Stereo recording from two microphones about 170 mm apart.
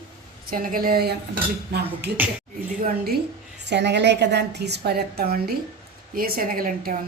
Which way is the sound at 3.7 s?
90° right.